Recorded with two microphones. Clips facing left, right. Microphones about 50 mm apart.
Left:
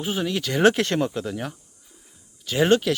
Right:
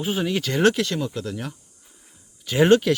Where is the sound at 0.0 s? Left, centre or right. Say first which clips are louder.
Right 2 dB; centre.